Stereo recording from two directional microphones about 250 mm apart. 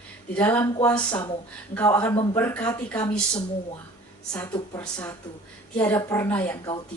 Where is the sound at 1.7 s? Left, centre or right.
Centre.